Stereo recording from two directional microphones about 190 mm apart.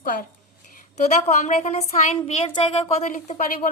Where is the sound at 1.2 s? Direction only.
40° left (ahead or behind).